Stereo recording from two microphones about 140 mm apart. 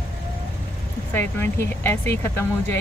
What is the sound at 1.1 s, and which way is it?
Speech, 15° left (ahead or behind).